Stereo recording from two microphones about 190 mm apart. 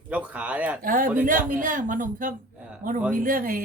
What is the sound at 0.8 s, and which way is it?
Speech, 45° right (ahead or behind).